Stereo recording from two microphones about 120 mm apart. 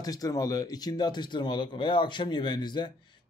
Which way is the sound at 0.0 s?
30° left (ahead or behind).